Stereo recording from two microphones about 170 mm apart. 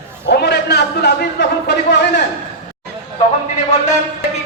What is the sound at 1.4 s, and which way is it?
Speech, 90° left.